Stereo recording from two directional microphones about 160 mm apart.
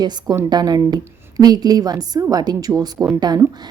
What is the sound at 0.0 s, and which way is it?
A woman's voice, 25° right (ahead or behind).